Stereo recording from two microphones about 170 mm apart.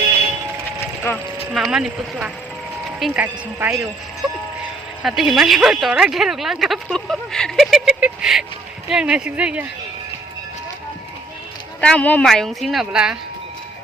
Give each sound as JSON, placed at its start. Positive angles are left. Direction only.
{"t": 1.5, "sound": "speech", "side_deg": -5}
{"t": 5.0, "sound": "speech", "side_deg": 0}
{"t": 11.8, "sound": "speech", "side_deg": 5}